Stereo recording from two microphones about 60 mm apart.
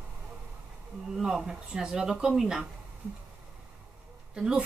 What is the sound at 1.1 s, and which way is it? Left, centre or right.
Speech, centre.